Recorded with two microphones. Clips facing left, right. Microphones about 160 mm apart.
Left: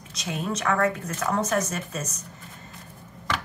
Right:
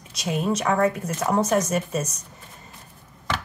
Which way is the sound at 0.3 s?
20° right (ahead or behind).